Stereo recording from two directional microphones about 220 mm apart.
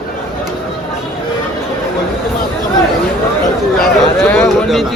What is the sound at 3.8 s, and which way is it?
Speech, centre (ahead or behind).